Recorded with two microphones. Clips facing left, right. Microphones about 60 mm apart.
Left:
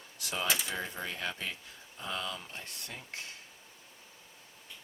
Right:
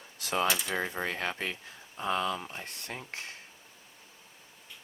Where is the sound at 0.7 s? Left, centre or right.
Right.